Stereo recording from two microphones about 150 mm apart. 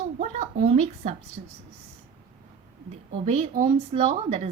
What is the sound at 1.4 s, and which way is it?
Speech, 60° right (ahead or behind).